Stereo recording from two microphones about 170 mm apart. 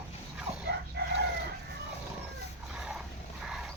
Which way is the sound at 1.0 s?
70° right (ahead or behind).